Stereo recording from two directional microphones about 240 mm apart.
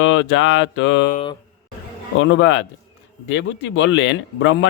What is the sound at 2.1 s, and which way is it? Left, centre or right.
A man's voice, left.